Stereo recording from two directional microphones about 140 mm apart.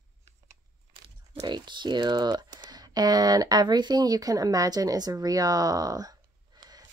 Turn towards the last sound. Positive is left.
turn(degrees=-25)  # may be behind; listen again after turning